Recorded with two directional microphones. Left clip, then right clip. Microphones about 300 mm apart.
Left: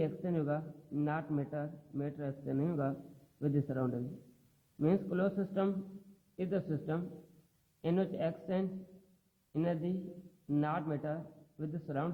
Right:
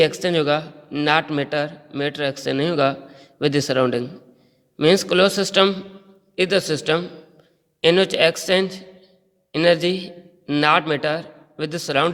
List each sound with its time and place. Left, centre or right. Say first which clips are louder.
0.0 s a man's voice: right 19 dB; right